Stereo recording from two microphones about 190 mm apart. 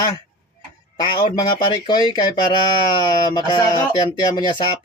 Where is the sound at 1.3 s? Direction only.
25° left (ahead or behind).